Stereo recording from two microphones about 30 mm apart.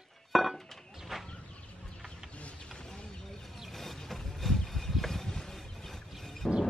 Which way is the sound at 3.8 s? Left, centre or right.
Centre.